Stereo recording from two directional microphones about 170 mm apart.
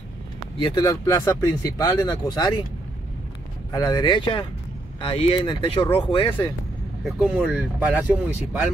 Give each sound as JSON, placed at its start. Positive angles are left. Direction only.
{"t": 0.6, "sound": "speech", "side_deg": 25}
{"t": 3.7, "sound": "speech", "side_deg": 20}
{"t": 7.1, "sound": "speech", "side_deg": -5}